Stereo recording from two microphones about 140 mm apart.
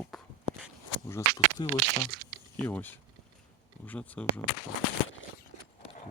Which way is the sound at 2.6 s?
15° left (ahead or behind).